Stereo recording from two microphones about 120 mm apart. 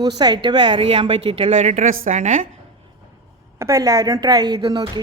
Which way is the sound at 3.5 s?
25° right (ahead or behind).